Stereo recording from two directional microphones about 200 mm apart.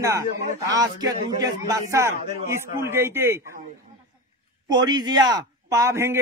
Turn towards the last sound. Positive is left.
turn(degrees=-10)  # may be behind; listen again after turning